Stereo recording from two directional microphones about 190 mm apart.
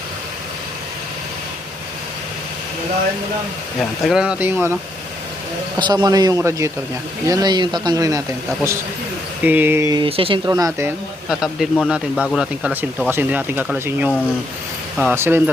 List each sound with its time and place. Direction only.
3.8 s speech: centre (ahead or behind)
5.8 s speech: 20° right (ahead or behind)
9.4 s speech: 10° right (ahead or behind)
11.3 s a man's voice: centre (ahead or behind)